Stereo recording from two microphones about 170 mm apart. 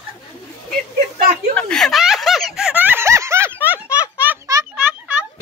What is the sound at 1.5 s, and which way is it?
Snicker, 5° left (ahead or behind).